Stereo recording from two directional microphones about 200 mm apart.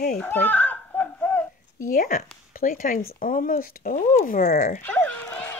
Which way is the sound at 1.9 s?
45° left (ahead or behind).